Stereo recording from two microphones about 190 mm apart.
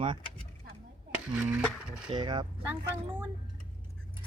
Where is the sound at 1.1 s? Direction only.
5° right (ahead or behind).